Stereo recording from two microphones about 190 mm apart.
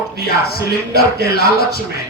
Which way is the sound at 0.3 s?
55° left (ahead or behind).